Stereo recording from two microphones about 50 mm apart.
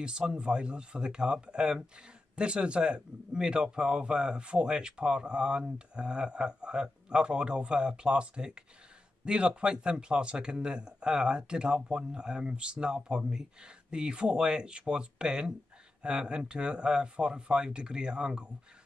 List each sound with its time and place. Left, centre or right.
0.0 s a man's voice: centre